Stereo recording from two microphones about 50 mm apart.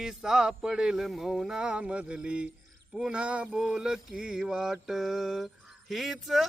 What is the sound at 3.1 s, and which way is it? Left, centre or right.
Male singing, right.